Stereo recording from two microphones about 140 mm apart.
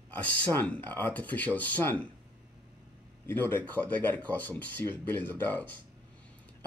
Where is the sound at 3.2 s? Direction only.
15° left (ahead or behind).